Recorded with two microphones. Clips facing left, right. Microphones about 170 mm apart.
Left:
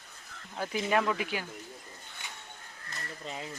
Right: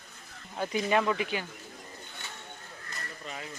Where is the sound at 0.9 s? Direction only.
Centre (ahead or behind).